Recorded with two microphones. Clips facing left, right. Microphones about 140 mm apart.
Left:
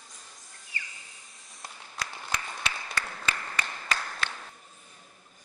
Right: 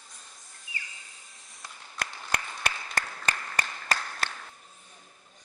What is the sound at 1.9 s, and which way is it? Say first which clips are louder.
Applause: right 2 dB; 50° right (ahead or behind).